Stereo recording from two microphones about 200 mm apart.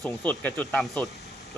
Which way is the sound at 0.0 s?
10° left (ahead or behind).